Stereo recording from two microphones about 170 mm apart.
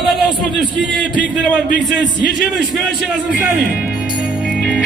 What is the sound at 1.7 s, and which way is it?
Speech, 90° right.